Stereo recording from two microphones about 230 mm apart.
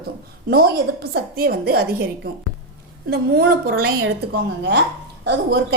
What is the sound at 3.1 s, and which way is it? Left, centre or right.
A woman's voice, right.